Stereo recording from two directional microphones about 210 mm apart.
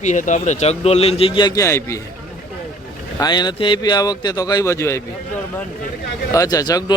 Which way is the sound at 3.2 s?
20° left (ahead or behind).